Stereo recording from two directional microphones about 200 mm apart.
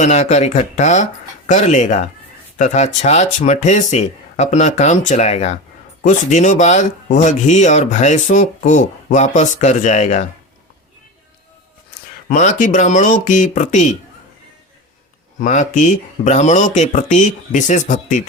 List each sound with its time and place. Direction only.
0.0 s speech: 35° left (ahead or behind)
12.3 s speech: 40° left (ahead or behind)
15.4 s speech: 40° left (ahead or behind)